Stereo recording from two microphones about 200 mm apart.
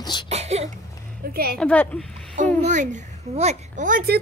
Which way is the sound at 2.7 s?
35° right (ahead or behind).